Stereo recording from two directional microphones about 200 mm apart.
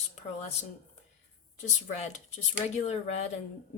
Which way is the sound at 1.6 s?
35° left (ahead or behind).